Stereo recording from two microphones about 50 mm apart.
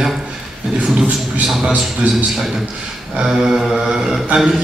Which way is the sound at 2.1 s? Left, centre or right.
Centre.